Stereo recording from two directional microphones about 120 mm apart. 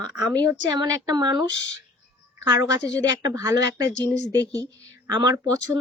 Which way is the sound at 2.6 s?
30° right (ahead or behind).